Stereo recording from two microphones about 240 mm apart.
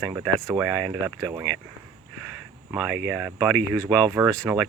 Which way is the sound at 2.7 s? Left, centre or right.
Centre.